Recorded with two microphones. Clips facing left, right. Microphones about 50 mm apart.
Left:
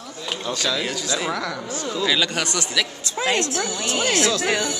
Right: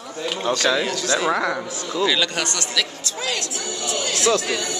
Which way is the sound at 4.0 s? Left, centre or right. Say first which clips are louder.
Left 7 dB; left.